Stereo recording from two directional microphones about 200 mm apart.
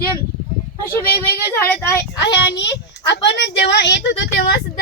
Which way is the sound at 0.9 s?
10° left (ahead or behind).